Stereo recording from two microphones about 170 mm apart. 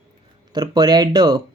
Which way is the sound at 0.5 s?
25° right (ahead or behind).